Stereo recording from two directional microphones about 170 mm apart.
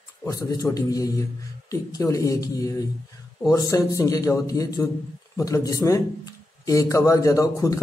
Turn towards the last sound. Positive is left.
turn(degrees=20)  # may be behind; listen again after turning